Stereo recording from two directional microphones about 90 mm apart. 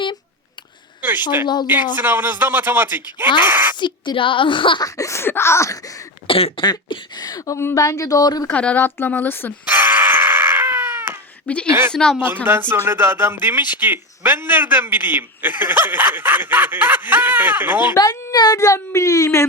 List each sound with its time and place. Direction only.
2.0 s speech: 20° right (ahead or behind)
3.8 s a woman's voice: 60° left (ahead or behind)
4.8 s speech: 35° left (ahead or behind)
6.2 s cough: 90° left
6.6 s speech: 60° left (ahead or behind)
8.4 s a woman's voice: 15° left (ahead or behind)
9.6 s a sound: 20° right (ahead or behind)
11.4 s speech: 15° left (ahead or behind)
12.1 s speech: 20° right (ahead or behind)
17.9 s speech: 45° left (ahead or behind)